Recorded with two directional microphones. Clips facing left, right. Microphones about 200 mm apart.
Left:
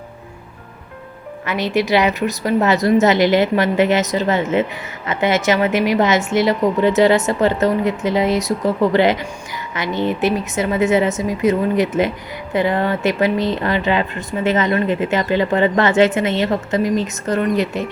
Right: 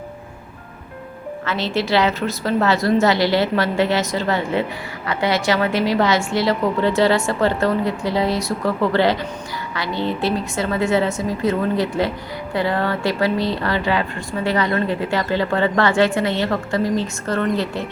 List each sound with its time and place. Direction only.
1.5 s speech: 15° left (ahead or behind)